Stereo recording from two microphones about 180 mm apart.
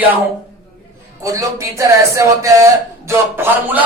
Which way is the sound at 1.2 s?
15° right (ahead or behind).